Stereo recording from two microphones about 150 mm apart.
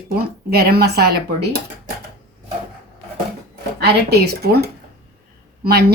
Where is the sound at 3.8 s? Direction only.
90° right.